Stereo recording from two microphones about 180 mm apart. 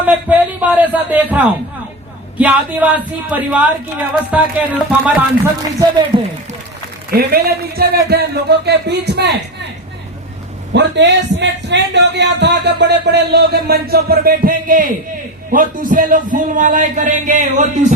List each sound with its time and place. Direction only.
0.0 s speech: 10° right (ahead or behind)
6.1 s a man's voice: 30° right (ahead or behind)
7.1 s speech: 60° right (ahead or behind)
10.7 s a man's voice: 75° right (ahead or behind); by 17.7 s 45° right (ahead or behind)